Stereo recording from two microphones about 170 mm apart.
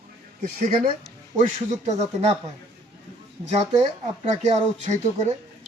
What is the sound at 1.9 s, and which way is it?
Speech, 40° right (ahead or behind).